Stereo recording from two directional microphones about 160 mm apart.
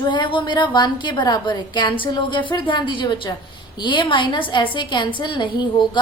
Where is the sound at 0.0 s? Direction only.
30° left (ahead or behind).